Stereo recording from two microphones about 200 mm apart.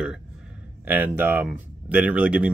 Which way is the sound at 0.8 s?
10° right (ahead or behind).